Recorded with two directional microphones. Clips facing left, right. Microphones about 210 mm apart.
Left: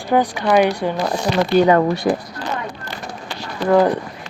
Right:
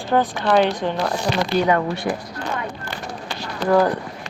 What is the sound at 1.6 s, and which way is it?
Speech, 35° left (ahead or behind).